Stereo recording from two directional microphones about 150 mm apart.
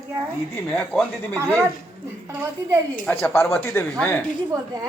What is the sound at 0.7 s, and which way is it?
Speech, 5° left (ahead or behind).